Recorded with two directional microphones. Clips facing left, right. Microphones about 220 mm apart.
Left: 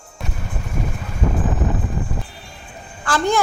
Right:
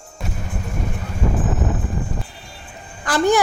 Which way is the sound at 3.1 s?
15° right (ahead or behind).